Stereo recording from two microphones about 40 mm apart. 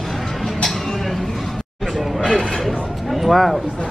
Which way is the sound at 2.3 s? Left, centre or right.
Centre.